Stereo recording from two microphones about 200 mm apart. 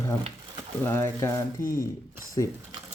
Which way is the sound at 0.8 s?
10° left (ahead or behind).